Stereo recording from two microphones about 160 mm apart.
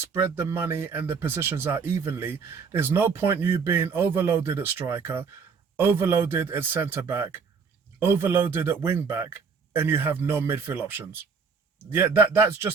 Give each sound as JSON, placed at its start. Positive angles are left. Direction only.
{"t": 0.0, "sound": "speech", "side_deg": -15}